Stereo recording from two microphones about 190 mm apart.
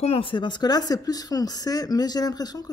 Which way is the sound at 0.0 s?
30° left (ahead or behind).